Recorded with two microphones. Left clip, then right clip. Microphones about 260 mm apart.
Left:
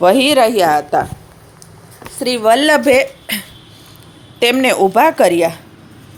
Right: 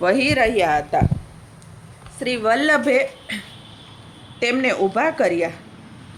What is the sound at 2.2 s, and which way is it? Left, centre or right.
A woman's voice, centre.